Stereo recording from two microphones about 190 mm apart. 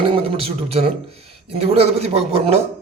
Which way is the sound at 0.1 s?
30° right (ahead or behind).